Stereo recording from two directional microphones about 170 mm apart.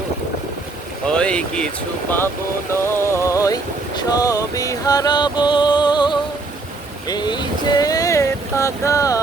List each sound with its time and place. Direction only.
1.0 s speech: 5° left (ahead or behind)
2.8 s boat: 15° left (ahead or behind)